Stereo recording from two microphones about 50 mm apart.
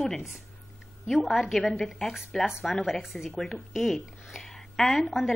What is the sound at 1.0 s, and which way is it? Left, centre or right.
A woman's voice, centre.